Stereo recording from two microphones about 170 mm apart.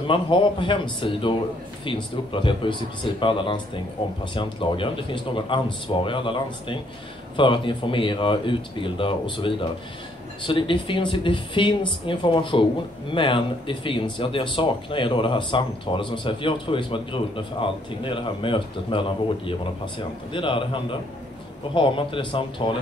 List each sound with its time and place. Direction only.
0.0 s speech: 30° left (ahead or behind)